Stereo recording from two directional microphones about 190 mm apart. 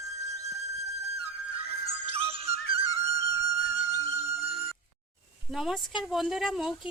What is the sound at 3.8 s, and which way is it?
Music, 30° right (ahead or behind).